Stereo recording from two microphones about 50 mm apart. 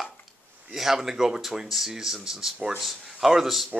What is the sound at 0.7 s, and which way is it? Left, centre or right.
Speech, centre.